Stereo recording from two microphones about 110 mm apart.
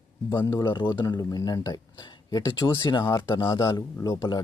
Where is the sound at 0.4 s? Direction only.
40° left (ahead or behind).